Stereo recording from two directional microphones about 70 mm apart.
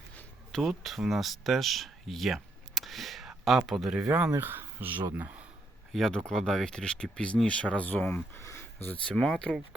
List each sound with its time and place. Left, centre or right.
0.5 s speech: centre
4.4 s speech: right
5.9 s speech: centre; by 8.2 s left
8.4 s speech: left
9.0 s speech: centre